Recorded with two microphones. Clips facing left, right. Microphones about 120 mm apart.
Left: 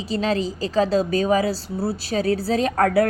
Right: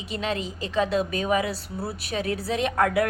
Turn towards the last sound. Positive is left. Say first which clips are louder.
# left 4 dB
turn(degrees=35)  # may be behind; listen again after turning